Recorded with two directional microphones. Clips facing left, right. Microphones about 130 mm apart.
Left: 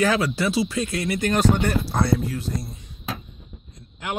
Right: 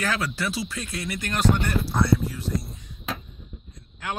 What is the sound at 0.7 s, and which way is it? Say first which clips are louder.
Speech: left 7 dB; 80° left.